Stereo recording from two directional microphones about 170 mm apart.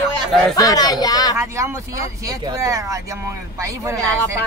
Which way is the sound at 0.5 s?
20° left (ahead or behind).